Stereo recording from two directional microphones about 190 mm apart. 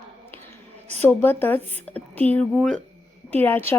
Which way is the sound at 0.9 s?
10° left (ahead or behind).